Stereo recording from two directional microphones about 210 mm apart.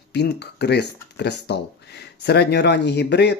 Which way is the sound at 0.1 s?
50° left (ahead or behind).